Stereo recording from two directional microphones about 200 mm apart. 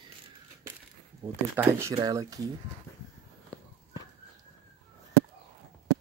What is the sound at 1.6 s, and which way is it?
Speech, 15° right (ahead or behind).